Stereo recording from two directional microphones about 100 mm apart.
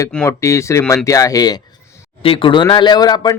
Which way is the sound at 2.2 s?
60° left (ahead or behind).